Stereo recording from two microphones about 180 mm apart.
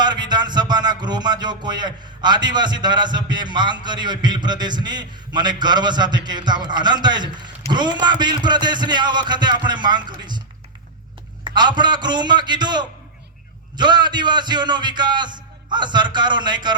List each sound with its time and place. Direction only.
0.0 s a man's voice: 25° right (ahead or behind)
11.4 s a man's voice: 25° right (ahead or behind)